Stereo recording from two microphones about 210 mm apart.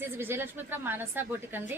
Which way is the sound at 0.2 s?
10° right (ahead or behind).